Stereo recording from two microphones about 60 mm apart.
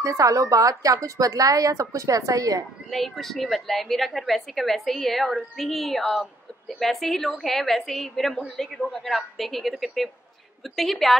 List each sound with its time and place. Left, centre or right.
0.0 s speech: right
2.9 s a woman's voice: centre